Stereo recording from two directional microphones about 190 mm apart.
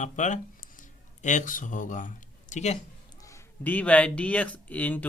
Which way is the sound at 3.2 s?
15° left (ahead or behind).